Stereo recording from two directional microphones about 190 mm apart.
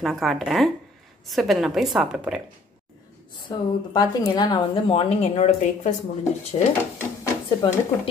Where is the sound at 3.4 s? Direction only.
25° left (ahead or behind).